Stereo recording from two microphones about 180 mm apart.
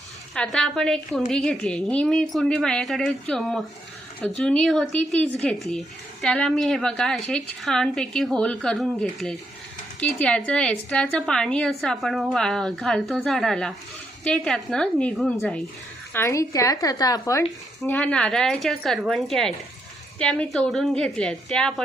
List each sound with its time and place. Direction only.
0.3 s a woman's voice: 5° left (ahead or behind); by 17.4 s 20° left (ahead or behind)
17.8 s a woman's voice: 10° left (ahead or behind)